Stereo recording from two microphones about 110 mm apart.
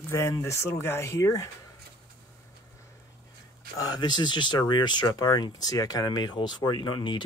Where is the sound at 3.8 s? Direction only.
40° left (ahead or behind).